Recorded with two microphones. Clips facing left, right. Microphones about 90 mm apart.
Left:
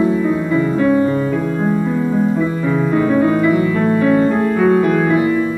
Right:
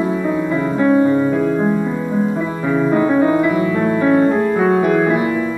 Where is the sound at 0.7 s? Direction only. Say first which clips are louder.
Right 4 dB; 20° right (ahead or behind).